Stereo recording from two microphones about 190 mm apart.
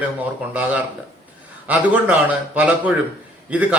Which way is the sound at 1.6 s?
10° right (ahead or behind).